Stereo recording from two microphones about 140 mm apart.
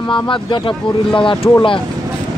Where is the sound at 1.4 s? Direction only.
25° left (ahead or behind).